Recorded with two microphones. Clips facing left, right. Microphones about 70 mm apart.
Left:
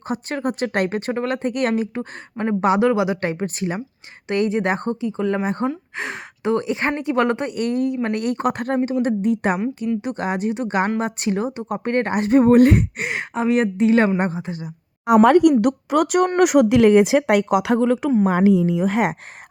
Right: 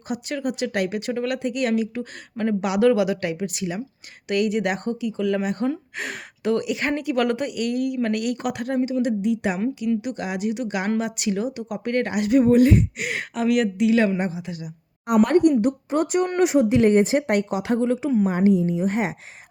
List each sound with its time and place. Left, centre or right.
0.1 s speech: left
13.0 s speech: left
15.1 s speech: left
18.3 s speech: left